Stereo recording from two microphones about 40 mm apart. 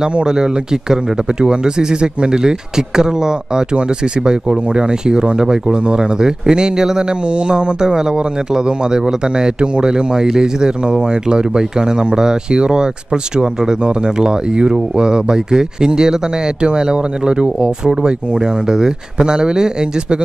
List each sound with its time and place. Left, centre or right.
0.0 s speech: centre